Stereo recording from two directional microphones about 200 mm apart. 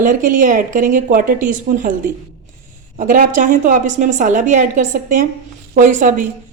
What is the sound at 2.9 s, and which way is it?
A woman's voice, 40° right (ahead or behind).